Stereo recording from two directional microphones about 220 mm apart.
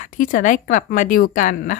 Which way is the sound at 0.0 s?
35° left (ahead or behind).